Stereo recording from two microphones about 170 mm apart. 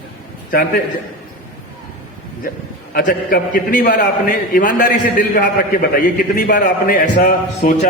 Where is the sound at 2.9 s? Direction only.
55° left (ahead or behind).